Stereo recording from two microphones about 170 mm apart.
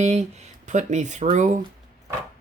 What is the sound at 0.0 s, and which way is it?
Speech, 40° right (ahead or behind).